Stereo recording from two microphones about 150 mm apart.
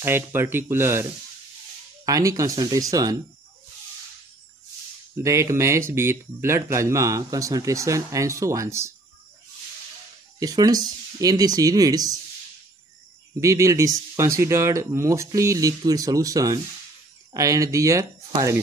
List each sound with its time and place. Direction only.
0.0 s speech: 15° right (ahead or behind)
2.0 s speech: 20° right (ahead or behind)
5.1 s speech: 20° right (ahead or behind)
10.4 s speech: 25° right (ahead or behind)
13.4 s speech: 20° right (ahead or behind)